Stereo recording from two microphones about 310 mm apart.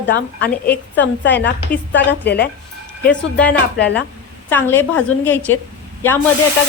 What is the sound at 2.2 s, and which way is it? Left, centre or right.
Speech, left.